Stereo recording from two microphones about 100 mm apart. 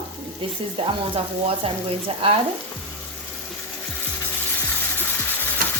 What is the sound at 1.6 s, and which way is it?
Speech, 65° right (ahead or behind).